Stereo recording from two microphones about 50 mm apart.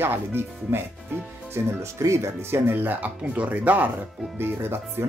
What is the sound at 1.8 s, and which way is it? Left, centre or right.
Speech, right.